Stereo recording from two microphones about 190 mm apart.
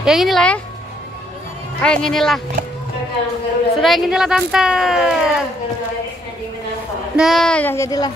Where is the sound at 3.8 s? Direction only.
Centre (ahead or behind).